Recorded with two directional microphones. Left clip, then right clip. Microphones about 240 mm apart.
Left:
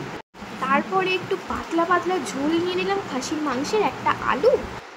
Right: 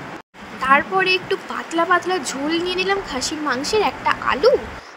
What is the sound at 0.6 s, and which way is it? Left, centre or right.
Speech, right.